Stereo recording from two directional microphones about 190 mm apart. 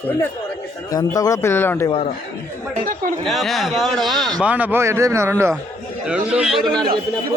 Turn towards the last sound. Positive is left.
turn(degrees=0)  # may be behind; listen again after turning